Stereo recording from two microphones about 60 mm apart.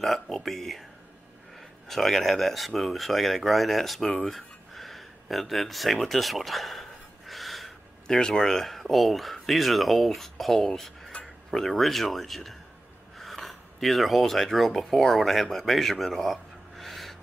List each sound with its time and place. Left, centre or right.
0.4 s speech: centre
1.9 s speech: centre